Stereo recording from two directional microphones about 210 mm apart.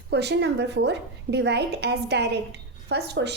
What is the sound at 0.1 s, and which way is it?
A woman's voice, 55° right (ahead or behind).